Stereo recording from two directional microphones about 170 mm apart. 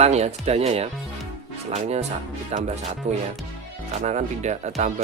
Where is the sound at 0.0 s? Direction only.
40° right (ahead or behind).